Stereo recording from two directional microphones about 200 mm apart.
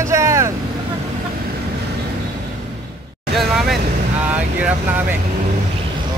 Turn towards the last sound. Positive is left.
turn(degrees=-5)  # may be behind; listen again after turning